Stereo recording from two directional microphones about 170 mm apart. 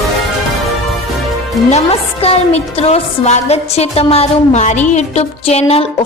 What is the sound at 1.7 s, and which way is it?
Music, 35° left (ahead or behind).